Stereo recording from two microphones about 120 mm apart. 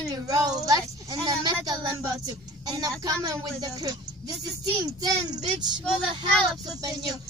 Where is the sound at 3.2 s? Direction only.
30° right (ahead or behind).